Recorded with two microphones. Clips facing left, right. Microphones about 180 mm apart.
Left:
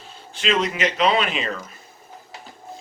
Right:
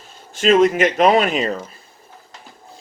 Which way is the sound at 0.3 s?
45° right (ahead or behind).